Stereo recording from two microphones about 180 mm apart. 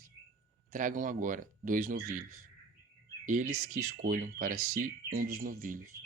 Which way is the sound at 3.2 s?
45° right (ahead or behind).